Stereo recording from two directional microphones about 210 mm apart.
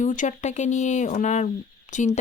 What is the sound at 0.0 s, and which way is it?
Speech, 35° left (ahead or behind).